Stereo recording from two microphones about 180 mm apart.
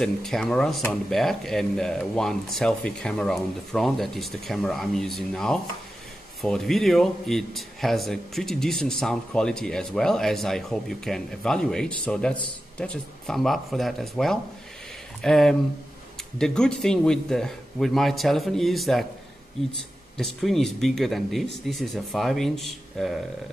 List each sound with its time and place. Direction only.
0.0 s a man's voice: centre (ahead or behind)
20.2 s a man's voice: centre (ahead or behind)